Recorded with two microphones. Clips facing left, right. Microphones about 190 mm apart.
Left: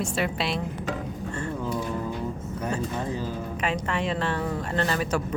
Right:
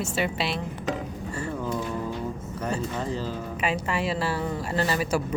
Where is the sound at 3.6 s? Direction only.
5° right (ahead or behind).